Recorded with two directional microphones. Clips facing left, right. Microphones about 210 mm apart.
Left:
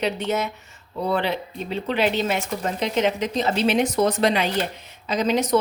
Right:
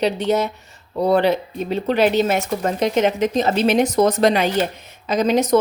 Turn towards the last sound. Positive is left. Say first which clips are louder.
# right 4 dB
turn(degrees=-45)  # may be behind; listen again after turning